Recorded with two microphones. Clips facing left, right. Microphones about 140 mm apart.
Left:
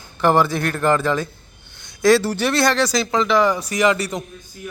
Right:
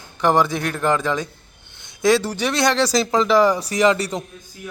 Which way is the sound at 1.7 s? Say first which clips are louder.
Left 1 dB; 25° right (ahead or behind).